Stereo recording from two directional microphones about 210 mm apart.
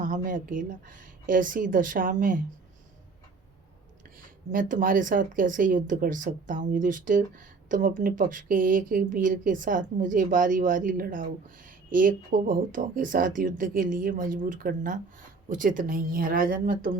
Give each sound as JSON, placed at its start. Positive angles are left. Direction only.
{"t": 0.0, "sound": "speech", "side_deg": -40}
{"t": 4.5, "sound": "speech", "side_deg": -40}